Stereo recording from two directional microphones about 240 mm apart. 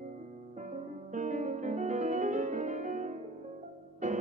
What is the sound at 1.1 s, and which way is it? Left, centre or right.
Music, right.